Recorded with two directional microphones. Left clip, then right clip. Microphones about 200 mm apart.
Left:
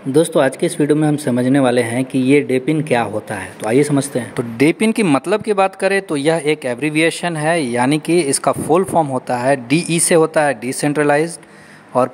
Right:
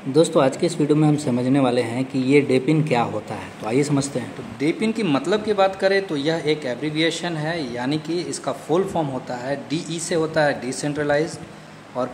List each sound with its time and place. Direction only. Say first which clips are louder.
0.3 s speech: left 3 dB; 30° left (ahead or behind)
4.6 s speech: left 8 dB; 50° left (ahead or behind)